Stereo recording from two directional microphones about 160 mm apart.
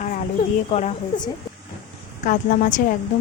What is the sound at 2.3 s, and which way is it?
Speech, 55° left (ahead or behind).